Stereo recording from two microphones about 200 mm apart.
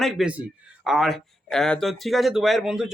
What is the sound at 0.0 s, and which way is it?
Speech, 5° right (ahead or behind).